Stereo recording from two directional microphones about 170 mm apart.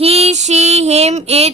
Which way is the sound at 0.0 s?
35° right (ahead or behind).